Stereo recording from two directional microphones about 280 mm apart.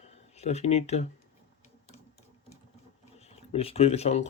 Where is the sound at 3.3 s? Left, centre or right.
Left.